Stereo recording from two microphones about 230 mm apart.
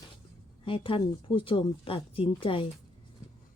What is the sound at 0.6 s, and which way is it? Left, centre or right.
A woman's voice, left.